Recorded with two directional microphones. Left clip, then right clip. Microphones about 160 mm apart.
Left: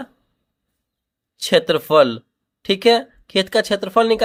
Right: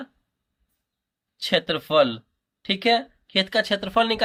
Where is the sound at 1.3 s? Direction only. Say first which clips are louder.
Left 7 dB; 55° left (ahead or behind).